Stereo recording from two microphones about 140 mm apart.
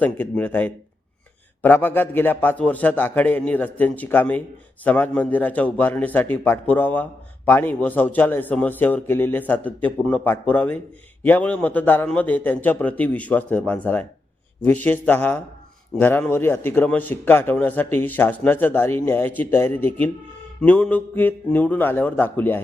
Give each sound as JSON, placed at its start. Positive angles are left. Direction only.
{"t": 0.0, "sound": "a man's voice", "side_deg": 10}